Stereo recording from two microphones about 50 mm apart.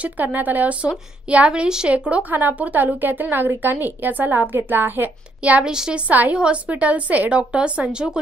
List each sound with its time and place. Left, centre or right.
0.0 s a woman's voice: right
0.8 s a woman's voice: right
2.0 s a woman's voice: right
5.4 s a woman's voice: right
6.0 s a woman's voice: right